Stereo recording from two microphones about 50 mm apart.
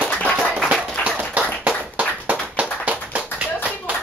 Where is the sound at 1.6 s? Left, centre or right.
Right.